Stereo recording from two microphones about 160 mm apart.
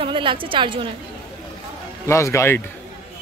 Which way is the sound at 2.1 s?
15° left (ahead or behind).